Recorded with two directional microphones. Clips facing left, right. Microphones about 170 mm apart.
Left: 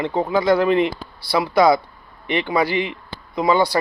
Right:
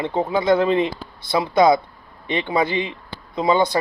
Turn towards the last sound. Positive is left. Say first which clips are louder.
# left 1 dB
turn(degrees=-20)  # may be behind; listen again after turning